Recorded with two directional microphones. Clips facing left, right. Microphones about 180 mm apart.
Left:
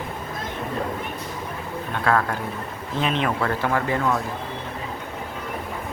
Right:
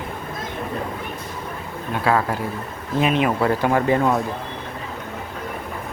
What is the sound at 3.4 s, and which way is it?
Speech, 20° right (ahead or behind).